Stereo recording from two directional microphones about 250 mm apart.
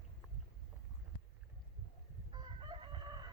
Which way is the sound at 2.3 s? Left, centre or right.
Centre.